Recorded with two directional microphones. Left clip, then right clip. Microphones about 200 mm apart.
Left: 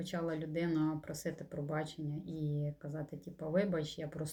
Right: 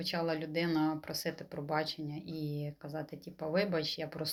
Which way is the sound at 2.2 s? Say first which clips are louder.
Right 1 dB; 10° right (ahead or behind).